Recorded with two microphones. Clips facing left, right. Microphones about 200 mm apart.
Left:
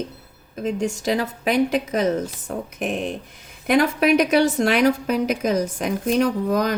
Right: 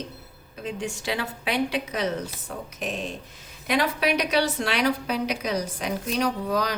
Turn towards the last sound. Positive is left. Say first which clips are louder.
# left 5 dB
turn(degrees=50)  # may be behind; listen again after turning